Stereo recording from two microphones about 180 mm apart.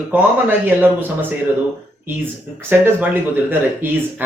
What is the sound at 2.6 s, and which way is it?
Speech, 10° right (ahead or behind).